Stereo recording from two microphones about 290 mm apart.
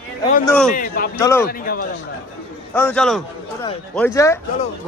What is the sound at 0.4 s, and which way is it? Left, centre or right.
Speech, centre.